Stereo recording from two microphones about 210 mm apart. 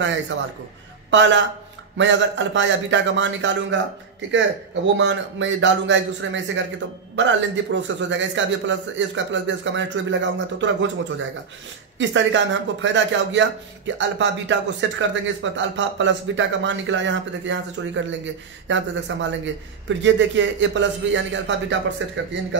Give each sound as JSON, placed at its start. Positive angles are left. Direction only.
{"t": 1.1, "sound": "a man's voice", "side_deg": -60}
{"t": 4.9, "sound": "a man's voice", "side_deg": -60}